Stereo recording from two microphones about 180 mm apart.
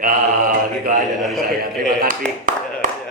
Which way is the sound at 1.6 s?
50° right (ahead or behind).